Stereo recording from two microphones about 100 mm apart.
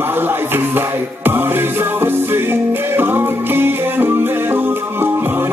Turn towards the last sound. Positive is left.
turn(degrees=-20)  # may be behind; listen again after turning